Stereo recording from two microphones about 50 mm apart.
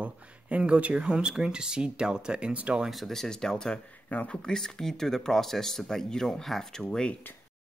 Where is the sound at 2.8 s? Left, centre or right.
Centre; by 4.5 s left.